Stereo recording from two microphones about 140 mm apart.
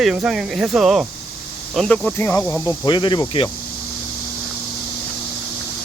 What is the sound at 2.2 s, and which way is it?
Speech, 15° left (ahead or behind).